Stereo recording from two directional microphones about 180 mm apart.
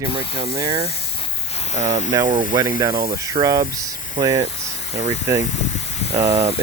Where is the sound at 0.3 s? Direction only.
20° right (ahead or behind).